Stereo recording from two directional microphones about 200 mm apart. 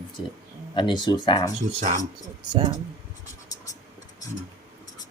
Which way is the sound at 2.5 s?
20° right (ahead or behind).